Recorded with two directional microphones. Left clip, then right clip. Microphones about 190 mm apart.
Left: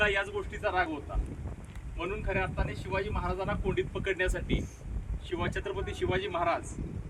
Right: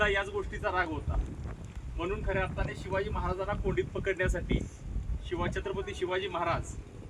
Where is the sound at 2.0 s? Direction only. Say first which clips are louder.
Even; 25° left (ahead or behind).